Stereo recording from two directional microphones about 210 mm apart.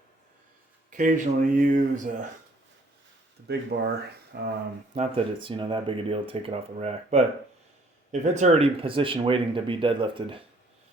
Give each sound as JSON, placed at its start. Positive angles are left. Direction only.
{"t": 0.9, "sound": "speech", "side_deg": -40}
{"t": 3.7, "sound": "speech", "side_deg": -55}
{"t": 4.9, "sound": "speech", "side_deg": -25}